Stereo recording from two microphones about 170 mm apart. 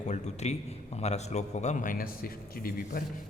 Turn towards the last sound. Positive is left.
turn(degrees=60)  # may be behind; listen again after turning